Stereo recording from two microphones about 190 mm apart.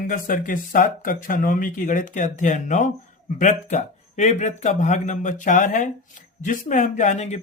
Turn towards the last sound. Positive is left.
turn(degrees=35)  # may be behind; listen again after turning